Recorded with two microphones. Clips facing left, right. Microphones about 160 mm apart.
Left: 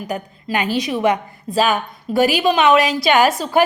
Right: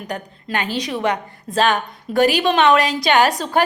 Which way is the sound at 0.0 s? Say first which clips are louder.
Left 3 dB; 5° left (ahead or behind).